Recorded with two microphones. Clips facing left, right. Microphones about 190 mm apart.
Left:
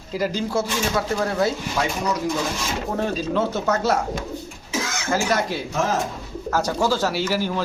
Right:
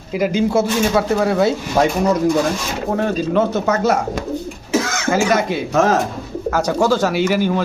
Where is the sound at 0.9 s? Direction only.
70° right (ahead or behind).